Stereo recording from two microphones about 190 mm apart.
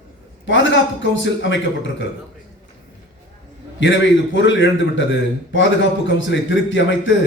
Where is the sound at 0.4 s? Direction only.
80° left.